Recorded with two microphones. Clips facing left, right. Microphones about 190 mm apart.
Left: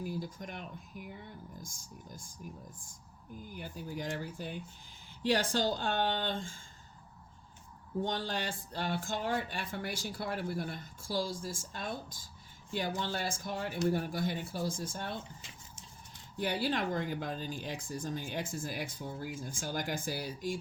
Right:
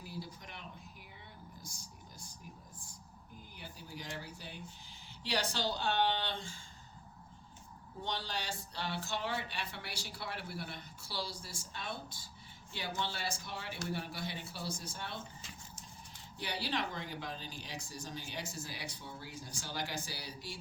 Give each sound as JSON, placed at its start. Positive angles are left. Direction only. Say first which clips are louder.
{"t": 0.0, "sound": "a sound", "louder": "left 8 dB", "side_deg": 45}
{"t": 1.6, "sound": "speech", "louder": "left 4 dB", "side_deg": 50}
{"t": 3.5, "sound": "speech", "louder": "left 8 dB", "side_deg": 50}
{"t": 8.0, "sound": "speech", "louder": "left 3 dB", "side_deg": 50}
{"t": 16.4, "sound": "speech", "louder": "left 6 dB", "side_deg": 50}